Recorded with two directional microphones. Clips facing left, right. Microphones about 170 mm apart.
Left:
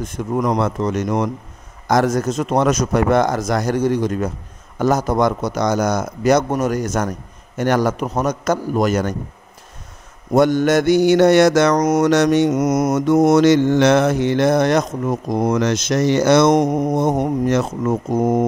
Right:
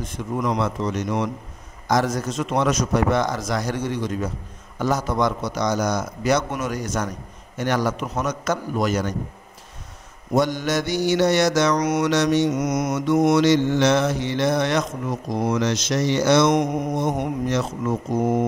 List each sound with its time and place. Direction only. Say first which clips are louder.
0.0 s mantra: left 5 dB; 45° left (ahead or behind)
10.3 s mantra: left 7 dB; 55° left (ahead or behind)